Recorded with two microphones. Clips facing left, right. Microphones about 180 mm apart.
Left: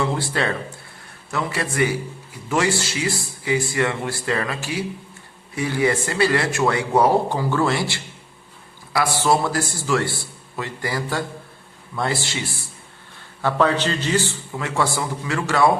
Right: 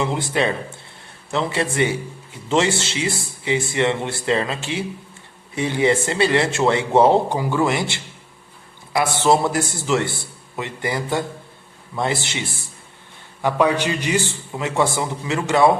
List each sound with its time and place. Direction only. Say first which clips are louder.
0.0 s a man's voice: right 2 dB; 20° right (ahead or behind)